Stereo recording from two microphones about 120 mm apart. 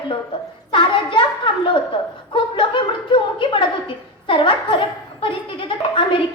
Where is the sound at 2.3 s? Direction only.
45° left (ahead or behind).